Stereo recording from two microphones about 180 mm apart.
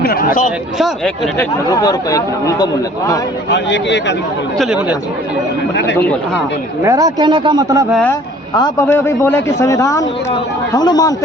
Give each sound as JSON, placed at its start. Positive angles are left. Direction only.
{"t": 0.0, "sound": "speech", "side_deg": 55}
{"t": 0.8, "sound": "speech", "side_deg": 0}
{"t": 1.4, "sound": "speech", "side_deg": 20}
{"t": 3.5, "sound": "speech", "side_deg": 75}
{"t": 4.5, "sound": "speech", "side_deg": 0}
{"t": 6.8, "sound": "a man's voice", "side_deg": -20}
{"t": 8.5, "sound": "a man's voice", "side_deg": 20}